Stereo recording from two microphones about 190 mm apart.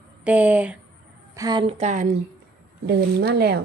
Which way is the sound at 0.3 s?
5° right (ahead or behind).